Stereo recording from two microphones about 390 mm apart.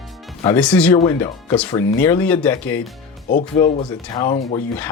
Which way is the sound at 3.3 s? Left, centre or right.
Centre.